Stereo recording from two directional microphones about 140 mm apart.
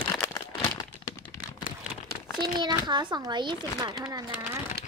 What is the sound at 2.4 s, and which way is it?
Speech, 30° right (ahead or behind).